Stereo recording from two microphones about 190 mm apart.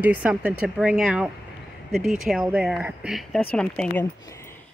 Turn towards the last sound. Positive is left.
turn(degrees=5)  # may be behind; listen again after turning